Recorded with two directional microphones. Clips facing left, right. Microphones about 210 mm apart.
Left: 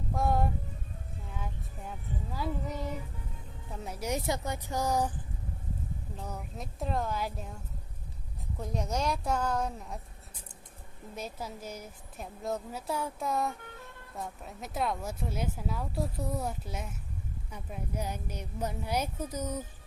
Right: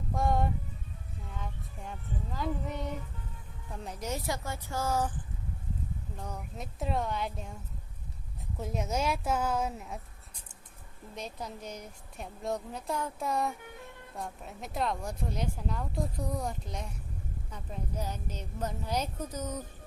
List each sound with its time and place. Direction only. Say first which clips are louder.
0.1 s music: even; centre (ahead or behind)
1.3 s a woman's voice: left 1 dB; 5° left (ahead or behind)
6.1 s speech: even; 5° left (ahead or behind)
11.1 s a woman's voice: left 1 dB; 5° left (ahead or behind)